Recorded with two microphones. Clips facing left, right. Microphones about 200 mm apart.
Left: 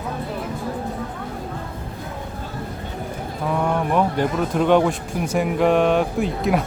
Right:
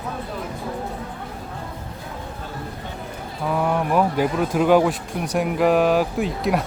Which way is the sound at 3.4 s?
5° right (ahead or behind).